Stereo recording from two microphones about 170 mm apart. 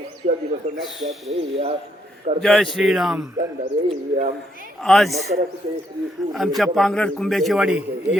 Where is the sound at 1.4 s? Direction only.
35° right (ahead or behind).